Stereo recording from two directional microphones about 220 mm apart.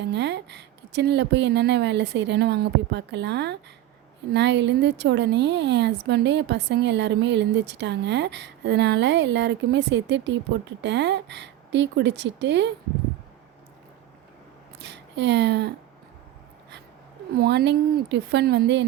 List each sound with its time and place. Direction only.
0.0 s speech: 50° right (ahead or behind)
14.8 s speech: 50° right (ahead or behind)
17.3 s speech: 45° right (ahead or behind)